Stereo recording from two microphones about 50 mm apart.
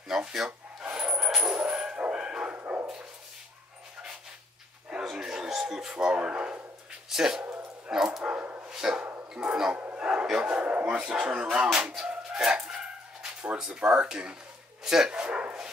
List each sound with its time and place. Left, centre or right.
0.1 s speech: centre
0.9 s dog: centre
5.1 s a sound: centre
7.1 s speech: centre
8.2 s bow-wow: right
8.6 s dog: centre
9.3 s speech: centre
9.9 s a sound: right
10.3 s speech: right
12.4 s dog: centre
13.6 s speech: centre